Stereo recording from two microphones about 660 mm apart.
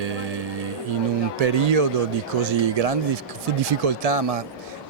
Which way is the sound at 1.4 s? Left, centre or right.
Right.